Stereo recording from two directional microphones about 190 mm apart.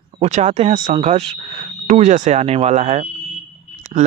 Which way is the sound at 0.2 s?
35° right (ahead or behind).